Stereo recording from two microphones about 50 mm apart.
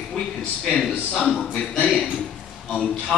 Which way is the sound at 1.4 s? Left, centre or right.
Centre.